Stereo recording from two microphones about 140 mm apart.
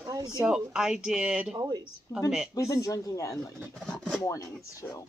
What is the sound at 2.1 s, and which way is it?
Speech, 25° left (ahead or behind).